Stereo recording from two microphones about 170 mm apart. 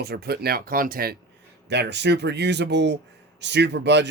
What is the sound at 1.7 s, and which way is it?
Speech, 85° right.